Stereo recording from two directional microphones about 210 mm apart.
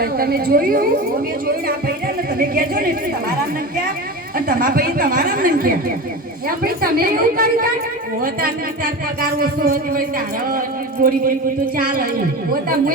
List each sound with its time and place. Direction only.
0.0 s speech: 45° right (ahead or behind)
2.4 s speech: 45° right (ahead or behind)
4.4 s speech: 45° right (ahead or behind)
11.0 s speech: 40° right (ahead or behind)